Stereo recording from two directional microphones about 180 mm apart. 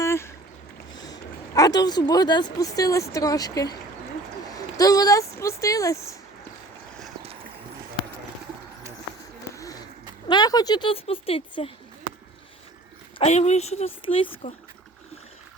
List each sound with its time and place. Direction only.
0.0 s boat: 15° left (ahead or behind)
0.9 s speech: 20° left (ahead or behind)
10.2 s speech: 25° left (ahead or behind)
13.1 s a woman's voice: 40° left (ahead or behind)